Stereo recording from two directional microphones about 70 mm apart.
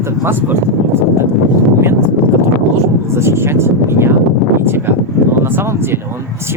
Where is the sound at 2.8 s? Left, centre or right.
Right.